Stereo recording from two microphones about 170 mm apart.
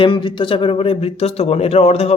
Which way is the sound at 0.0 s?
30° left (ahead or behind).